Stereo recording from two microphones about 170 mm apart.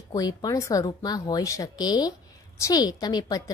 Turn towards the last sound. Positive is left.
turn(degrees=25)  # may be behind; listen again after turning